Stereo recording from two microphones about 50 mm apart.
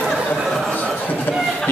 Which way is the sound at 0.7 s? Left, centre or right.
Left.